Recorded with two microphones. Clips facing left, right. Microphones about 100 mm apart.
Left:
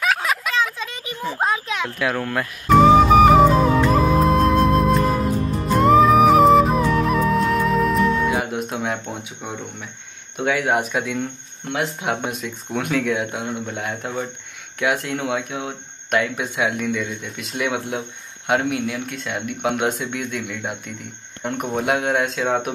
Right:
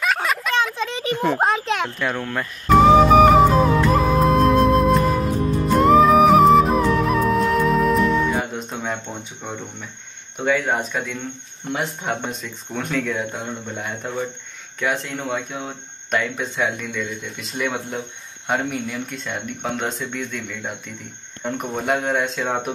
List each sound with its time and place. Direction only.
0.0 s a sound: centre (ahead or behind)
1.1 s a child's voice: 65° right (ahead or behind)
2.0 s flute: centre (ahead or behind)
10.3 s speech: 5° left (ahead or behind)